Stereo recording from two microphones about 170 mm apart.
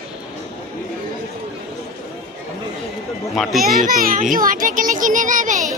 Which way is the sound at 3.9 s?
55° right (ahead or behind).